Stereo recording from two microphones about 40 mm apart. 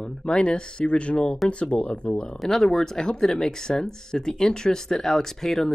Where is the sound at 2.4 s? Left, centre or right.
Centre.